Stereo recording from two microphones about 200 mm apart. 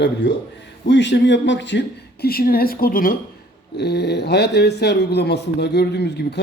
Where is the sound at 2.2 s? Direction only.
50° left (ahead or behind).